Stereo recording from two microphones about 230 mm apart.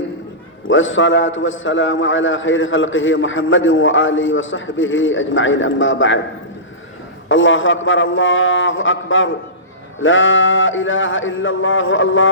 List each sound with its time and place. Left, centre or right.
0.7 s a man's voice: left
7.3 s a man's voice: left